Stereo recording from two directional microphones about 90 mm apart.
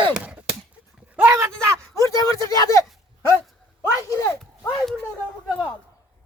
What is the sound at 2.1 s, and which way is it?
Speech, 45° left (ahead or behind).